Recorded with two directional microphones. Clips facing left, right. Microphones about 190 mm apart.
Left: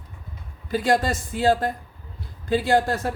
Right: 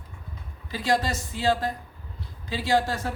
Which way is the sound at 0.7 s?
50° left (ahead or behind).